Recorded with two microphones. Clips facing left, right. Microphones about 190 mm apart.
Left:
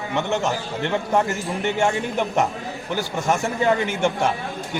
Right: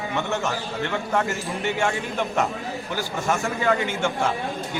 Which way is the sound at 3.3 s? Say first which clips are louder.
Left 3 dB; 15° left (ahead or behind).